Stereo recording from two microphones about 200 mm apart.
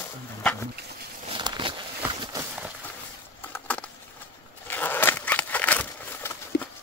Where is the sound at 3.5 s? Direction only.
5° left (ahead or behind).